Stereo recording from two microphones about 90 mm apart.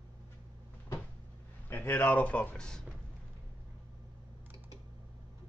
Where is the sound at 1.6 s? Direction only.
20° left (ahead or behind).